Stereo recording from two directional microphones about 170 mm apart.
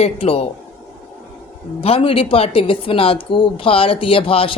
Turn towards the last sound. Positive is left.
turn(degrees=35)  # may be behind; listen again after turning